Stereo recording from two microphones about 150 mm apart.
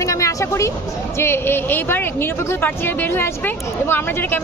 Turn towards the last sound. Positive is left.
turn(degrees=15)  # may be behind; listen again after turning